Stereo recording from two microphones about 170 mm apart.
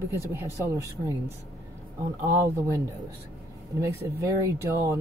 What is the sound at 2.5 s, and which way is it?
Speech, 15° right (ahead or behind).